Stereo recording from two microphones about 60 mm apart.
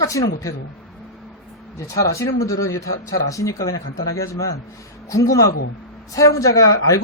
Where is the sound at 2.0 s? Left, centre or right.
Left.